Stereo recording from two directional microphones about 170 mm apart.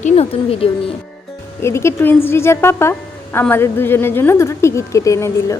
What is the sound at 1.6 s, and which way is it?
A woman's voice, 15° left (ahead or behind).